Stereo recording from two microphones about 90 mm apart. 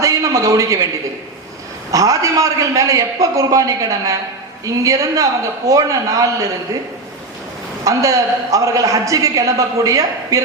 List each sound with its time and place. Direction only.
0.0 s a man's voice: 40° right (ahead or behind)
1.9 s a man's voice: 40° right (ahead or behind)
7.9 s a man's voice: 35° right (ahead or behind)